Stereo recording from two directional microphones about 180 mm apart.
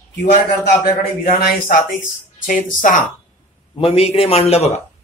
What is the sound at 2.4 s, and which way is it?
Speech, 45° left (ahead or behind).